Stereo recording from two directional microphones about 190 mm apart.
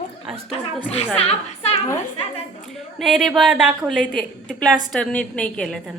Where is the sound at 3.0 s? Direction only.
Centre (ahead or behind).